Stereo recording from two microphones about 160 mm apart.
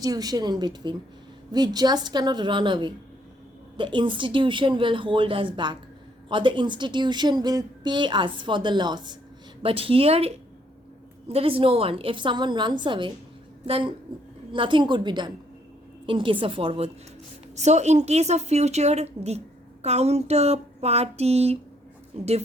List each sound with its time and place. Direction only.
0.0 s a woman's voice: 25° right (ahead or behind); by 22.3 s 45° right (ahead or behind)